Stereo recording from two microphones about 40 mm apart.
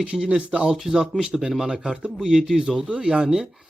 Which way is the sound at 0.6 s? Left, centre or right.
Centre.